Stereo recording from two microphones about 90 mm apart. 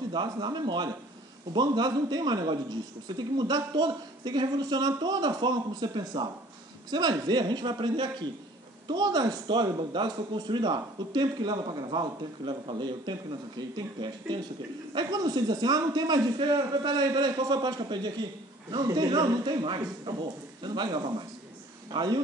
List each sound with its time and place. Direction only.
0.1 s a man's voice: 55° right (ahead or behind)